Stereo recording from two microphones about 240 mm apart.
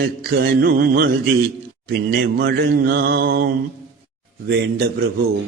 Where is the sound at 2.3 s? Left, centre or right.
Right.